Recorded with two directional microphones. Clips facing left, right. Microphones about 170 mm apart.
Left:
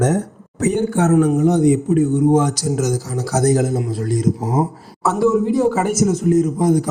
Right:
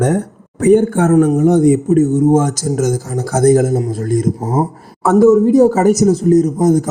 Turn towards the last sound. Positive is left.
turn(degrees=-40)  # may be behind; listen again after turning